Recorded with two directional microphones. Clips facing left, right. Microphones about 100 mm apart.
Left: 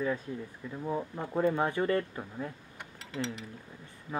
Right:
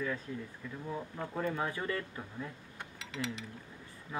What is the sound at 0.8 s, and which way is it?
Speech, 25° left (ahead or behind).